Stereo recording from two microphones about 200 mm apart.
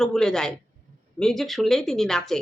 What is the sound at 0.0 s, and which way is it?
Speech, 5° left (ahead or behind).